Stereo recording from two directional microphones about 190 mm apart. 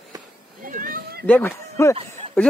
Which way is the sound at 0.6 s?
45° right (ahead or behind).